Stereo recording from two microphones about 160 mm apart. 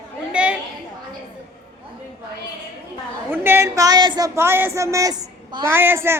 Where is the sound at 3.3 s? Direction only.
15° right (ahead or behind).